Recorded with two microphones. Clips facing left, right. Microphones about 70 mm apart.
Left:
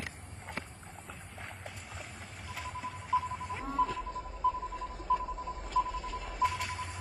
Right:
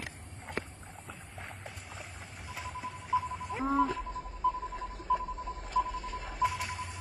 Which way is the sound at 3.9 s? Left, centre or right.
Centre.